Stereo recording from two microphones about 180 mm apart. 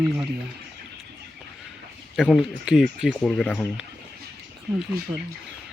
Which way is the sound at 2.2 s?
Centre (ahead or behind).